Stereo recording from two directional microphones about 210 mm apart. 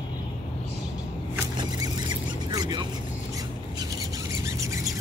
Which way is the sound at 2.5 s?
20° right (ahead or behind).